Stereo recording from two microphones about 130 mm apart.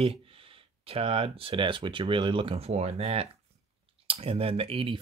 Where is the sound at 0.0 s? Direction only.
45° right (ahead or behind).